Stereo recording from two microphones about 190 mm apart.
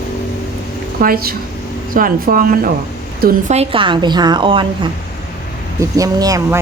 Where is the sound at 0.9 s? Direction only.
50° right (ahead or behind).